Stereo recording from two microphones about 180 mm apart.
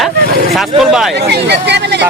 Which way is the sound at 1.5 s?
70° right (ahead or behind).